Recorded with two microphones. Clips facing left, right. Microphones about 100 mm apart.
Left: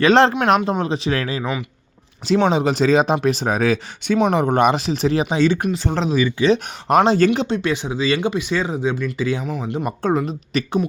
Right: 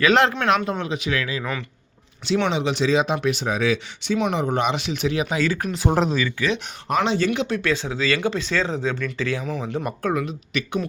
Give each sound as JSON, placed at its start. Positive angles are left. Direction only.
{"t": 0.0, "sound": "speech", "side_deg": 30}
{"t": 4.8, "sound": "speech", "side_deg": 35}
{"t": 5.8, "sound": "speech", "side_deg": -10}
{"t": 6.1, "sound": "speech", "side_deg": 20}
{"t": 7.0, "sound": "speech", "side_deg": 40}
{"t": 7.4, "sound": "speech", "side_deg": 20}
{"t": 9.8, "sound": "speech", "side_deg": 30}